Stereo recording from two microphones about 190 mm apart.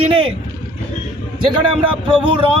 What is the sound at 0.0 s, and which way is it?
Vehicle, 30° right (ahead or behind).